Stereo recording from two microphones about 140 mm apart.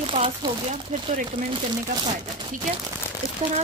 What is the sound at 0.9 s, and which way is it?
Speech, 55° right (ahead or behind).